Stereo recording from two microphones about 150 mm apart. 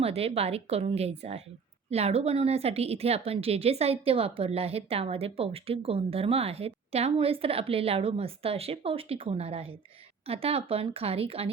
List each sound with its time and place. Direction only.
0.0 s a woman's voice: 40° right (ahead or behind)